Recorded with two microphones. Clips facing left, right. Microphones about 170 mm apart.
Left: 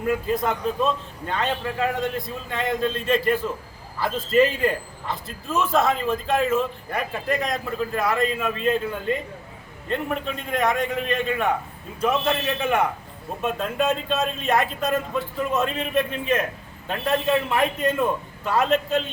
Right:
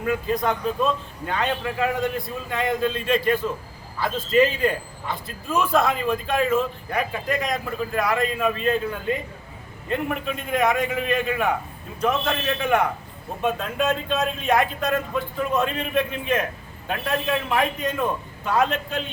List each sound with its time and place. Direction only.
0.0 s a man's voice: centre (ahead or behind)